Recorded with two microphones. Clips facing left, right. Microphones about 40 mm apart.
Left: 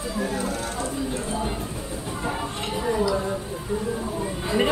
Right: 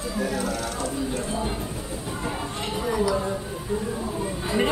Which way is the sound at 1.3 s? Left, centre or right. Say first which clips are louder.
Even; centre.